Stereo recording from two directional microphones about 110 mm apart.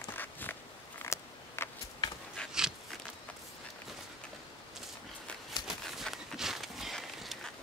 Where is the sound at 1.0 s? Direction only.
25° left (ahead or behind).